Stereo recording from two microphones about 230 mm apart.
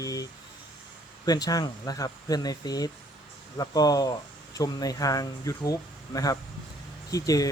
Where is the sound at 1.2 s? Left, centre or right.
Centre.